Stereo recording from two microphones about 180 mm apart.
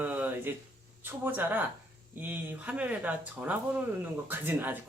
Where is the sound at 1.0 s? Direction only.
10° right (ahead or behind).